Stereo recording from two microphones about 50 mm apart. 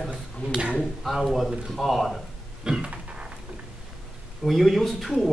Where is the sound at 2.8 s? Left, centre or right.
Right.